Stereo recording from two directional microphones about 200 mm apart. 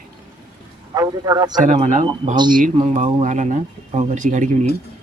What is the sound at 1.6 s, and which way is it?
Speech, 40° right (ahead or behind).